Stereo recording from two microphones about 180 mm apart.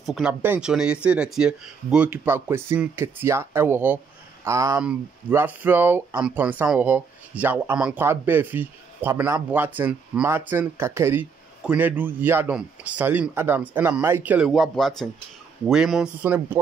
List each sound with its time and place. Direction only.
0.0 s speech: 5° right (ahead or behind)